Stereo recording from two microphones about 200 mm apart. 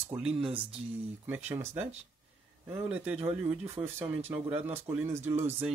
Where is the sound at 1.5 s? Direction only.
10° right (ahead or behind).